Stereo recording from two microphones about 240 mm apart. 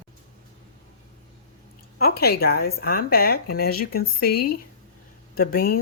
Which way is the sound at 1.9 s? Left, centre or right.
Left.